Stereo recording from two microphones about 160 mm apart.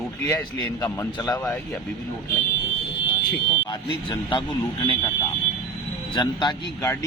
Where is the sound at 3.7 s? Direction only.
25° left (ahead or behind).